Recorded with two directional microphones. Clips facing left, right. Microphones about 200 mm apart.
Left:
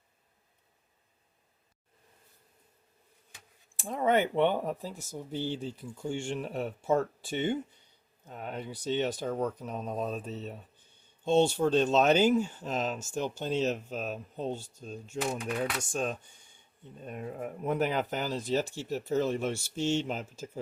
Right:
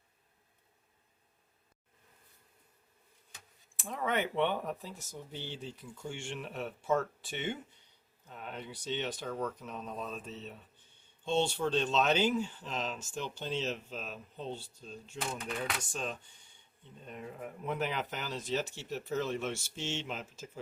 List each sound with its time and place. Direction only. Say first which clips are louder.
3.8 s speech: left 7 dB; 30° left (ahead or behind)